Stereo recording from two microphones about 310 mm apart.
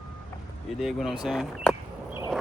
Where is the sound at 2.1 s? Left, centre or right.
Centre.